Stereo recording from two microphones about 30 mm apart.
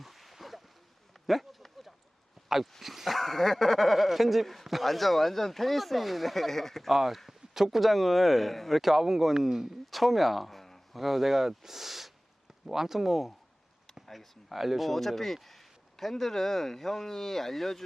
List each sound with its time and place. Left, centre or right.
0.0 s a sound: centre
2.8 s speech: centre
6.7 s speech: centre
9.9 s a sound: centre
11.0 s speech: centre
14.9 s speech: centre